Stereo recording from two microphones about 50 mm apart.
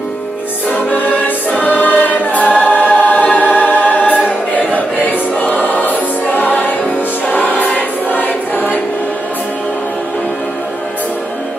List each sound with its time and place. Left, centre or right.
0.7 s music: left
1.6 s choir: left